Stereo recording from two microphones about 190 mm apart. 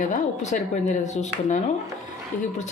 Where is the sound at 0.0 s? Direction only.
40° left (ahead or behind).